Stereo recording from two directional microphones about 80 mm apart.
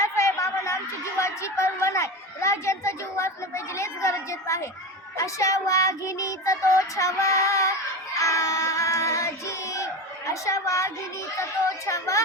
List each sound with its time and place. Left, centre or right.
0.0 s a sound: left
5.1 s child singing: left
8.2 s music: left
11.9 s child singing: left